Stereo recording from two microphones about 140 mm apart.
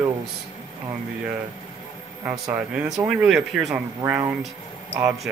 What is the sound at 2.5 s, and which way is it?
Speech, 10° right (ahead or behind).